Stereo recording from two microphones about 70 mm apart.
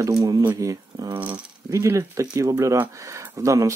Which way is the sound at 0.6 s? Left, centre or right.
Right.